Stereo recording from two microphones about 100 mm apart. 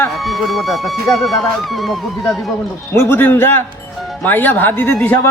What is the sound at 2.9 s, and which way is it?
Speech, 25° left (ahead or behind).